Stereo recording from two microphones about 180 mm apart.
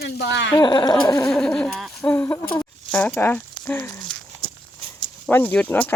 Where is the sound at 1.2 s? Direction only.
5° left (ahead or behind).